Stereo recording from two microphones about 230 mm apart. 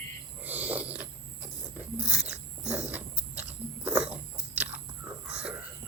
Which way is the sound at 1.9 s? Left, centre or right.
Centre.